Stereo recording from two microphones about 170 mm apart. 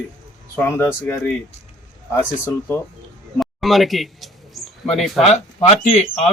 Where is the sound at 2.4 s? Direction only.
15° left (ahead or behind).